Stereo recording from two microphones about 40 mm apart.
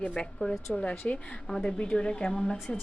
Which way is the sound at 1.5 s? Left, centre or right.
Left.